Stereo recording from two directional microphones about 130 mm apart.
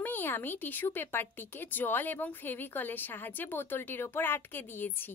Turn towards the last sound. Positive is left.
turn(degrees=15)  # may be behind; listen again after turning